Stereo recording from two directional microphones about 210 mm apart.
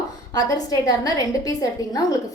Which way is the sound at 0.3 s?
20° left (ahead or behind).